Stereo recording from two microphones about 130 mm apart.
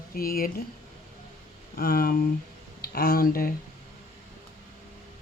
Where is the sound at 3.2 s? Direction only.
90° left.